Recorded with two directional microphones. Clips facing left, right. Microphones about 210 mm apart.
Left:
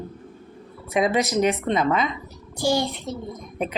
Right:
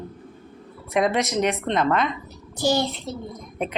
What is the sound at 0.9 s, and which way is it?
Speech, centre (ahead or behind).